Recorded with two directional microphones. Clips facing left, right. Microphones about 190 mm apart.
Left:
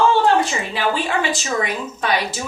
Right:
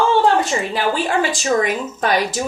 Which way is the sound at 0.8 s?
45° right (ahead or behind).